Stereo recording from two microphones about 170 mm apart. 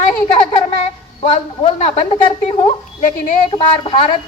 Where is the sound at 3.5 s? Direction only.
30° left (ahead or behind).